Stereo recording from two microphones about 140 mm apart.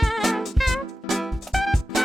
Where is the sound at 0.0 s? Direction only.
Centre (ahead or behind).